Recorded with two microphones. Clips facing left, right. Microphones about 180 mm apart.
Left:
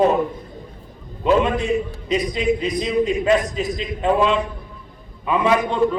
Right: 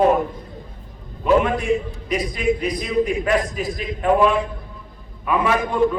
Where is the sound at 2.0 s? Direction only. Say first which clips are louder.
Left 1 dB; 20° left (ahead or behind).